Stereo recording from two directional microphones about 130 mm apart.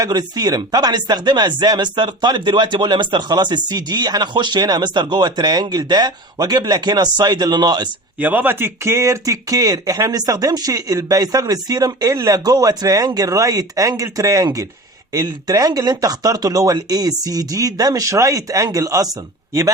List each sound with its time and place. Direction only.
0.0 s speech: 30° right (ahead or behind)
8.2 s speech: 15° right (ahead or behind)